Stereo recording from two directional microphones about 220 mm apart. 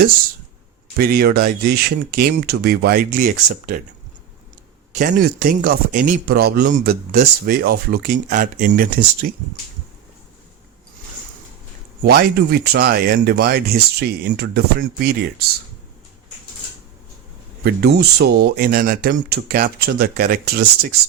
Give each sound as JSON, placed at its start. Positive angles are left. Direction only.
{"t": 0.9, "sound": "speech", "side_deg": -40}
{"t": 4.9, "sound": "a man's voice", "side_deg": -35}
{"t": 12.0, "sound": "speech", "side_deg": -45}
{"t": 17.6, "sound": "speech", "side_deg": -45}